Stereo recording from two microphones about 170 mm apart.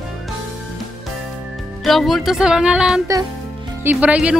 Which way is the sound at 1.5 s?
Centre (ahead or behind).